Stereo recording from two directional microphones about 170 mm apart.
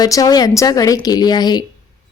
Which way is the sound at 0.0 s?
20° left (ahead or behind).